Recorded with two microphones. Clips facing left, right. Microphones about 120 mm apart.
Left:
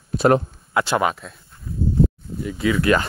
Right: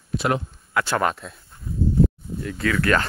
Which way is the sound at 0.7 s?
20° left (ahead or behind).